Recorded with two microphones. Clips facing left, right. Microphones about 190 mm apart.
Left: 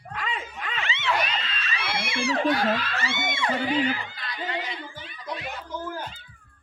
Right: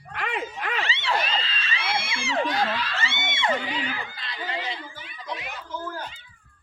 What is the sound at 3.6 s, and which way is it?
Speech, 45° left (ahead or behind).